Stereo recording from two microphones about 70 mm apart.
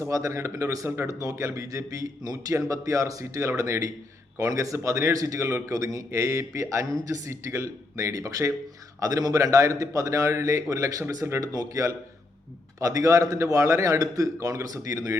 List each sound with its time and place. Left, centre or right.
0.0 s a man's voice: right